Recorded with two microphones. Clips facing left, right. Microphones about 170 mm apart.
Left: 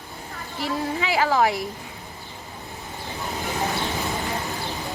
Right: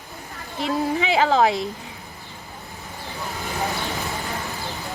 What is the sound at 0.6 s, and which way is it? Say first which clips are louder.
A woman's voice: right 4 dB; 20° right (ahead or behind).